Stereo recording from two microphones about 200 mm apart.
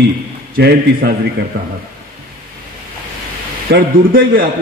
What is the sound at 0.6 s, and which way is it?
Speech, 55° right (ahead or behind).